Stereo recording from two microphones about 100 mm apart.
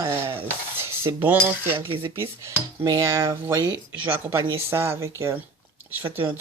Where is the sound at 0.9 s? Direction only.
20° right (ahead or behind).